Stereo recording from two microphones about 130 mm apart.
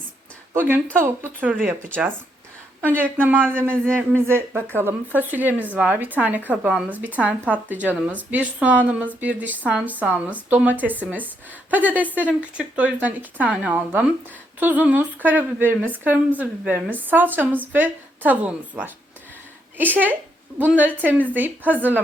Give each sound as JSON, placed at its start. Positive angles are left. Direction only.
{"t": 0.5, "sound": "speech", "side_deg": -15}
{"t": 2.8, "sound": "speech", "side_deg": -15}